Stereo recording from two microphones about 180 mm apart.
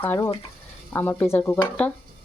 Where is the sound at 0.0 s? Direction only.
10° left (ahead or behind).